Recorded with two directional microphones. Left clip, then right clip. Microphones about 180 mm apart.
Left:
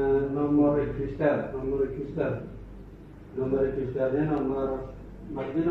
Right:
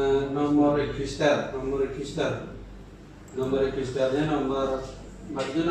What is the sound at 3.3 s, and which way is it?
A man's voice, 20° right (ahead or behind).